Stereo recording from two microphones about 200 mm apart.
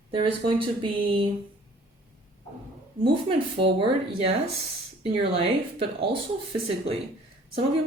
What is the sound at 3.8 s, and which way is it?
Speech, 30° right (ahead or behind).